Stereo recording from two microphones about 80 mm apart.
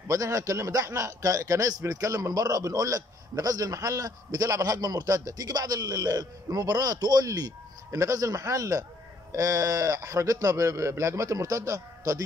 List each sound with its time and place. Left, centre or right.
0.1 s a man's voice: right